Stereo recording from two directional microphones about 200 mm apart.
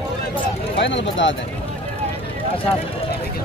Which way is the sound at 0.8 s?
65° left (ahead or behind).